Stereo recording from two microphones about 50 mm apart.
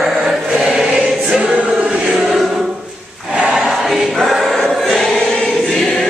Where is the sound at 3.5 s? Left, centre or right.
Centre.